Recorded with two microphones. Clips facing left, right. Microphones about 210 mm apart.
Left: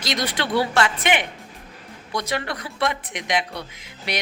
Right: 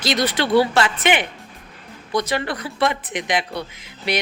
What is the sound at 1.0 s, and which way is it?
Speech, 5° right (ahead or behind).